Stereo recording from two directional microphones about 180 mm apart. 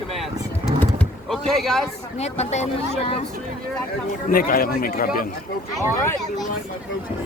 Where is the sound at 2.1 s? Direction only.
35° left (ahead or behind).